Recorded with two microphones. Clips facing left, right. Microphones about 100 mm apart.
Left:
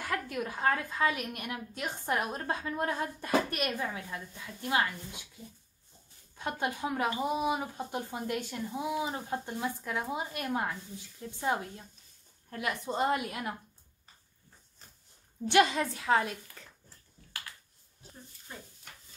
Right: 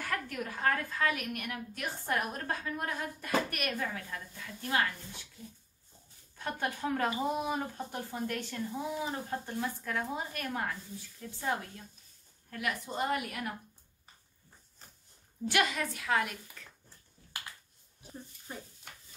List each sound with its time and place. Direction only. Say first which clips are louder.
0.0 s a woman's voice: left 2 dB; 20° left (ahead or behind)
6.3 s a woman's voice: left 2 dB; 20° left (ahead or behind)
15.4 s a woman's voice: left 5 dB; 25° left (ahead or behind)